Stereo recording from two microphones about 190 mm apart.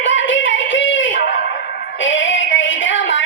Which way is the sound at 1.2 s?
55° left (ahead or behind).